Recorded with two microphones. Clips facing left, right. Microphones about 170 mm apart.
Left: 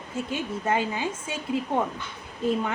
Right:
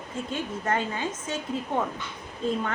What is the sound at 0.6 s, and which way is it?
Speech, 10° left (ahead or behind).